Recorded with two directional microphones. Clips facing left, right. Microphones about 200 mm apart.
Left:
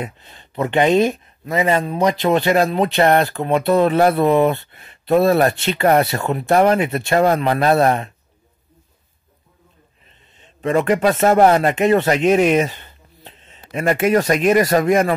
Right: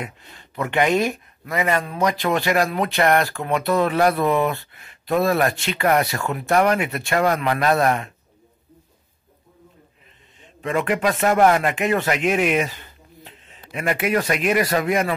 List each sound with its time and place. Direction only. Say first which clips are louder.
0.0 s speech: left 4 dB; 25° left (ahead or behind)
10.6 s speech: left 5 dB; 40° left (ahead or behind)